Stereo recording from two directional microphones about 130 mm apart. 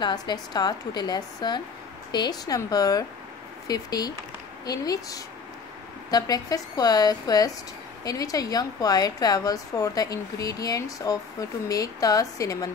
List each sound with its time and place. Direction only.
0.0 s a woman's voice: 35° left (ahead or behind)